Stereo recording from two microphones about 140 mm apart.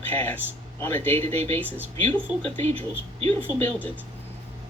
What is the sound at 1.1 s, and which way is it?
Speech, 50° right (ahead or behind).